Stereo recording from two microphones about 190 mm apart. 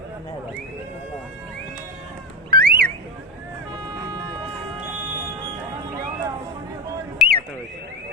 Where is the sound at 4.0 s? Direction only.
20° right (ahead or behind).